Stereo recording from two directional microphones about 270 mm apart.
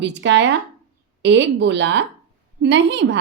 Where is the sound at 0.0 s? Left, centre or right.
Right.